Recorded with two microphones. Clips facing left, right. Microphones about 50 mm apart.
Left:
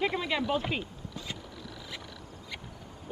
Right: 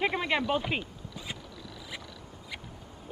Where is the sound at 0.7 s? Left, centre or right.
Centre.